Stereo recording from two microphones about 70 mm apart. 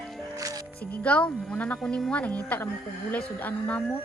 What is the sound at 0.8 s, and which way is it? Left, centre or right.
Speech, left.